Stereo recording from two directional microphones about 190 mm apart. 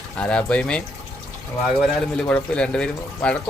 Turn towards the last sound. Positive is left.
turn(degrees=5)  # may be behind; listen again after turning